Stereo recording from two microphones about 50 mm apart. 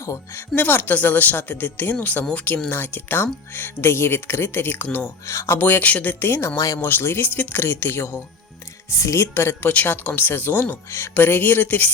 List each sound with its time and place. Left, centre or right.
0.0 s speech: left
0.5 s speech: left
5.2 s speech: left
5.5 s speech: left
8.9 s speech: left
9.3 s speech: left
9.6 s speech: left